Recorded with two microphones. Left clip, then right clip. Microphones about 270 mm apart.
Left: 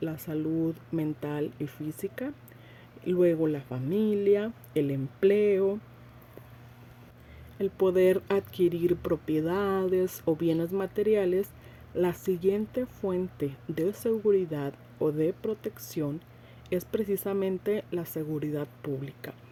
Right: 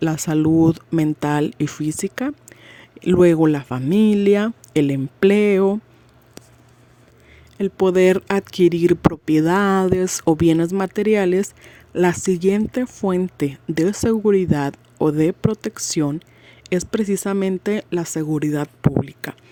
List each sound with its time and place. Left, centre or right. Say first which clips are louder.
0.0 s speech: right 13 dB; right
7.6 s speech: right 8 dB; right